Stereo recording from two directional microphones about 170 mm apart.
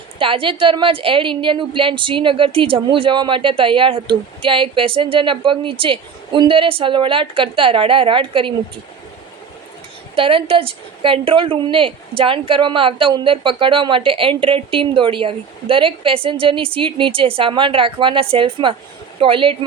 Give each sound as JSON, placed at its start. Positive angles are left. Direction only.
{"t": 0.2, "sound": "a woman's voice", "side_deg": -30}
{"t": 10.2, "sound": "a woman's voice", "side_deg": -30}